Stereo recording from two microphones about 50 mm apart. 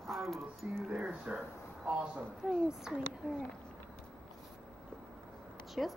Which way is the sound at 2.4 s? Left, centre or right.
Centre.